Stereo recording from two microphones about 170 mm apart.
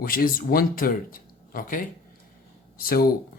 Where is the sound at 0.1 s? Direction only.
60° left (ahead or behind).